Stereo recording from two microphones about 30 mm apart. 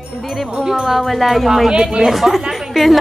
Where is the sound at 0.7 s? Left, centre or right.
Centre.